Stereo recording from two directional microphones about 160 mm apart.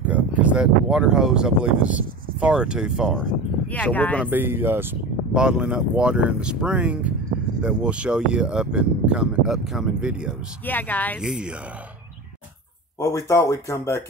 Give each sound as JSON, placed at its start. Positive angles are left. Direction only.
{"t": 0.4, "sound": "speech", "side_deg": -5}
{"t": 3.7, "sound": "speech", "side_deg": 10}
{"t": 4.3, "sound": "speech", "side_deg": -15}
{"t": 10.6, "sound": "speech", "side_deg": 10}
{"t": 11.1, "sound": "speech", "side_deg": -5}
{"t": 13.0, "sound": "speech", "side_deg": 20}